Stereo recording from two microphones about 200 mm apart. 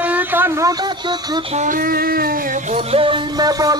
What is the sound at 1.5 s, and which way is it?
Child singing, 40° right (ahead or behind).